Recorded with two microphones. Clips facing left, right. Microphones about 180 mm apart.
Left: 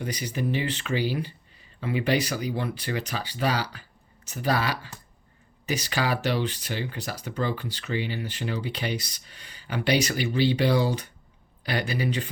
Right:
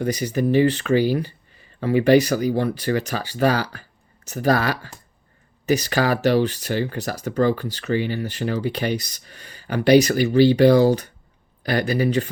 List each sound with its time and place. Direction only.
0.0 s speech: 45° right (ahead or behind)